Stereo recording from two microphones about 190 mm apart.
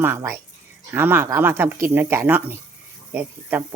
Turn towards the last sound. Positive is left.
turn(degrees=-10)  # may be behind; listen again after turning